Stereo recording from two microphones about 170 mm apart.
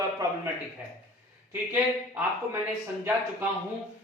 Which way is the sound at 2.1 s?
15° right (ahead or behind).